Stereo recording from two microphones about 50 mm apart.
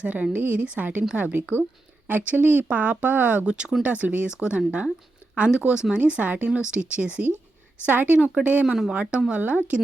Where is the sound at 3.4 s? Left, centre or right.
Centre.